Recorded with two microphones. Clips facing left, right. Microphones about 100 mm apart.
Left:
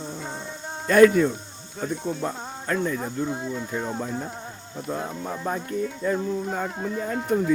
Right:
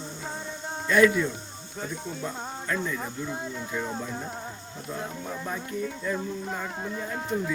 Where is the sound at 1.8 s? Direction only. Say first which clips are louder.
Left 6 dB; centre (ahead or behind).